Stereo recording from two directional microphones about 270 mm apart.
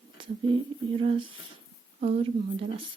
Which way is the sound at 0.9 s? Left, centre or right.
Centre.